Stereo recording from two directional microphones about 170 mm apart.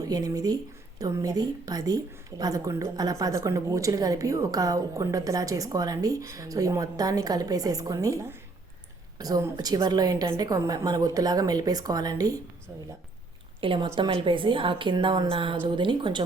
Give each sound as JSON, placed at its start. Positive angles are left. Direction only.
{"t": 0.1, "sound": "a woman's voice", "side_deg": -20}
{"t": 13.6, "sound": "a woman's voice", "side_deg": -30}